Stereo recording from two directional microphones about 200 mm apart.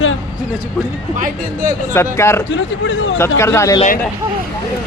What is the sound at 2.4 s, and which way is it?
Speech, 70° left (ahead or behind).